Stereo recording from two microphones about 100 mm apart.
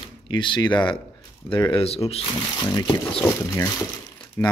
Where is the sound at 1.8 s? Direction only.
85° left.